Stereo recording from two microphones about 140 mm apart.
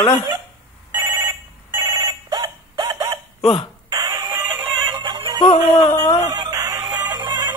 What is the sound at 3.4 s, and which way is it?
Hiccup, 45° left (ahead or behind).